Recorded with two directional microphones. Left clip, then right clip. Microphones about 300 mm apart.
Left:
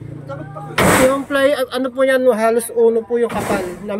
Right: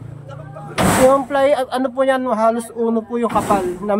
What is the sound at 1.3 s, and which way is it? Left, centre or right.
Speech, centre.